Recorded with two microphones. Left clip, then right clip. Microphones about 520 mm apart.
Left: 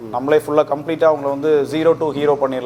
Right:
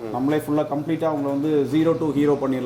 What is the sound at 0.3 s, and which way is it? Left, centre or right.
A man's voice, left.